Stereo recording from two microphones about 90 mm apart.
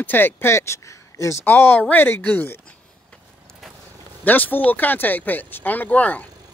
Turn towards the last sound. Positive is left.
turn(degrees=15)  # may be behind; listen again after turning